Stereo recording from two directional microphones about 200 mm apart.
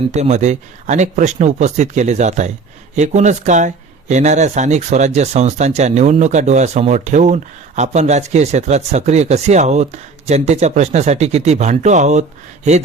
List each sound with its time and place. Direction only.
0.1 s speech: 35° right (ahead or behind)